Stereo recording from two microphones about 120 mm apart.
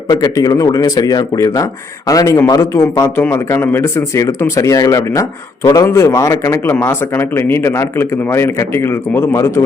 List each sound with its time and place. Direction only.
0.1 s speech: 30° left (ahead or behind)